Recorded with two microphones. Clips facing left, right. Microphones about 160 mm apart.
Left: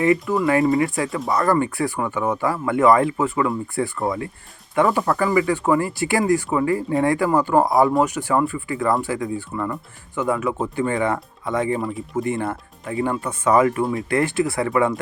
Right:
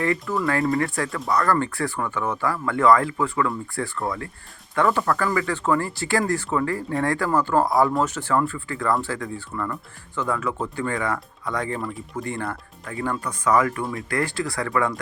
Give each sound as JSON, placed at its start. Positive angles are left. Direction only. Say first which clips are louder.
{"t": 0.0, "sound": "speech", "louder": "left 5 dB", "side_deg": 20}